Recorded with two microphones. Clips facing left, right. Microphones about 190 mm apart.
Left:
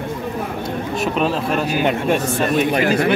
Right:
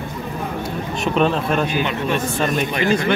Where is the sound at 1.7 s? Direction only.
45° left (ahead or behind).